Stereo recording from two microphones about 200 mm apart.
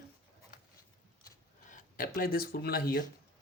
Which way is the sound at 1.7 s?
45° left (ahead or behind).